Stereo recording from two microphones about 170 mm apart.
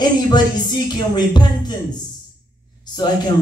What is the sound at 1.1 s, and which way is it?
Speech, 25° left (ahead or behind).